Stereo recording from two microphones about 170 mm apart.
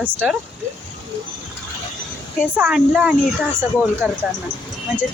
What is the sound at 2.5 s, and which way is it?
Speech, 5° right (ahead or behind).